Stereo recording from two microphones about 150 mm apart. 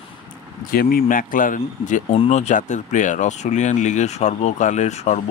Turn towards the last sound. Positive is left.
turn(degrees=50)  # may be behind; listen again after turning